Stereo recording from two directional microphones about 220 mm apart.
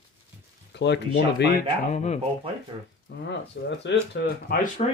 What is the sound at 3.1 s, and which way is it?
Speech, 55° left (ahead or behind).